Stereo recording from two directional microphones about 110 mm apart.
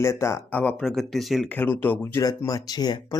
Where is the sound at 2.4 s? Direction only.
35° left (ahead or behind).